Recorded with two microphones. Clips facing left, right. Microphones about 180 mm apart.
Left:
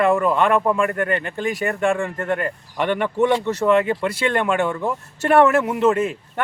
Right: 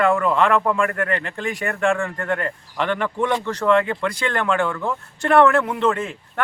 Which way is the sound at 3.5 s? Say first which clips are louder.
Left 1 dB; 5° left (ahead or behind).